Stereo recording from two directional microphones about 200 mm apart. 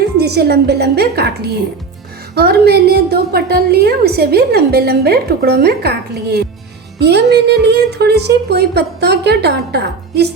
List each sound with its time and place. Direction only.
0.2 s a woman's voice: 55° right (ahead or behind)